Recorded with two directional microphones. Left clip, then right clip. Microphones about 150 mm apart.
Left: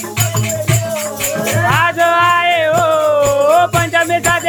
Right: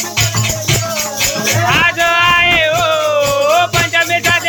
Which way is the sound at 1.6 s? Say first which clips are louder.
Even; 40° left (ahead or behind).